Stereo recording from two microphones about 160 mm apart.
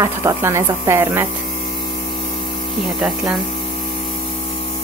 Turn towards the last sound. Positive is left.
turn(degrees=0)  # may be behind; listen again after turning